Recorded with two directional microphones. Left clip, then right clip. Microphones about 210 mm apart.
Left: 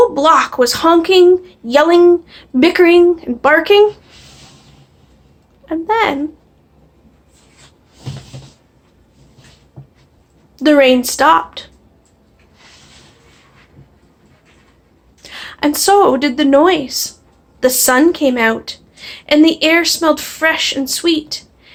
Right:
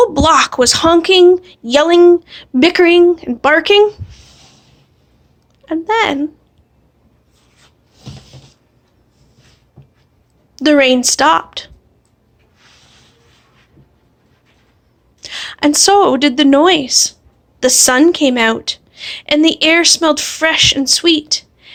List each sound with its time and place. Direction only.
0.0 s a woman's voice: 45° right (ahead or behind)
5.6 s a woman's voice: 40° right (ahead or behind)
10.6 s a woman's voice: 40° right (ahead or behind)
15.2 s a woman's voice: 45° right (ahead or behind)